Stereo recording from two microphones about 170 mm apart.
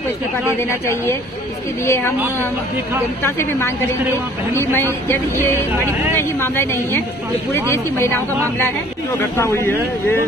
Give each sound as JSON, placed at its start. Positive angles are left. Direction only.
{"t": 0.6, "sound": "speech", "side_deg": 15}
{"t": 3.2, "sound": "speech", "side_deg": 15}
{"t": 9.2, "sound": "speech", "side_deg": 15}